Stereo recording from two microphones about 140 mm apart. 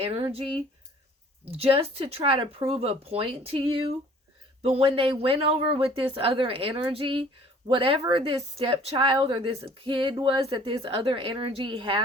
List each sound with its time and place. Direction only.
0.0 s speech: 45° right (ahead or behind)
1.5 s speech: 45° right (ahead or behind)